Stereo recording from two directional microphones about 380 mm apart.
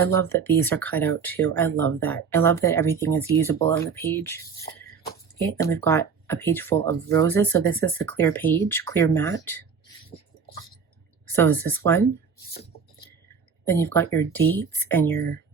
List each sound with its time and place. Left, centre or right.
0.0 s speech: centre
5.5 s speech: centre
11.3 s speech: centre
13.7 s speech: centre